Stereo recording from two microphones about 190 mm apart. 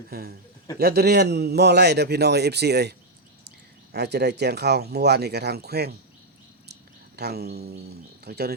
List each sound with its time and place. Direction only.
0.1 s a man's voice: 55° right (ahead or behind)
3.9 s a man's voice: 60° right (ahead or behind)
7.2 s a man's voice: 55° right (ahead or behind)